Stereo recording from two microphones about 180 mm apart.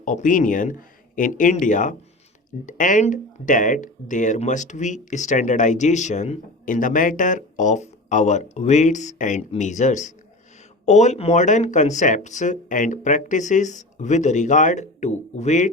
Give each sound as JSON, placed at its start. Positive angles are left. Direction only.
{"t": 0.0, "sound": "speech", "side_deg": 45}